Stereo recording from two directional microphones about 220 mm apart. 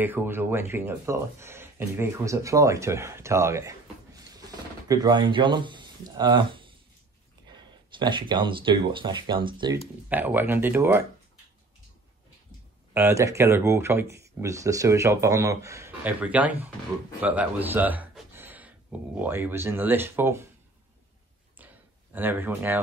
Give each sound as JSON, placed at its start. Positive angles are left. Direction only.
{"t": 0.0, "sound": "speech", "side_deg": -10}
{"t": 10.0, "sound": "speech", "side_deg": -10}
{"t": 12.9, "sound": "speech", "side_deg": -10}
{"t": 21.5, "sound": "a sound", "side_deg": -10}